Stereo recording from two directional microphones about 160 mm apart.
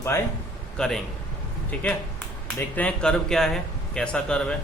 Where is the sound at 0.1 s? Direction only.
15° left (ahead or behind).